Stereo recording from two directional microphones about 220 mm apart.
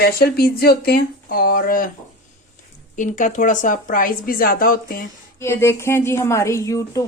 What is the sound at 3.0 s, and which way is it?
Speech, 35° left (ahead or behind).